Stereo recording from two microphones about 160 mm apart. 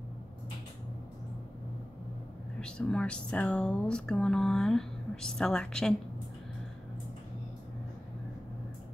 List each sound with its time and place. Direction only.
2.6 s speech: 5° left (ahead or behind)